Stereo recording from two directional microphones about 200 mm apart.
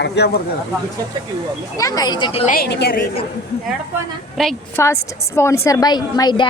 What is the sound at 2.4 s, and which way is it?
Speech, 45° left (ahead or behind).